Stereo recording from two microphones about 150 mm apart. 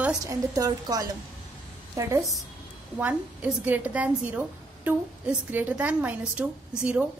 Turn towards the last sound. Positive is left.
turn(degrees=-10)  # may be behind; listen again after turning